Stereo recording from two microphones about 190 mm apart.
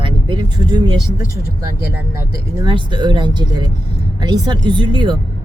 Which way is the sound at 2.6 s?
25° right (ahead or behind).